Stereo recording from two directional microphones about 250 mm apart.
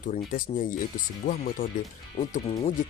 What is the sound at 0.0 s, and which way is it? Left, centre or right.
Speech, left.